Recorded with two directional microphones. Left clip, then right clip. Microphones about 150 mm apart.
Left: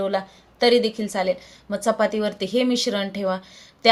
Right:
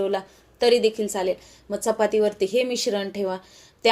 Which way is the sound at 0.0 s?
45° right (ahead or behind).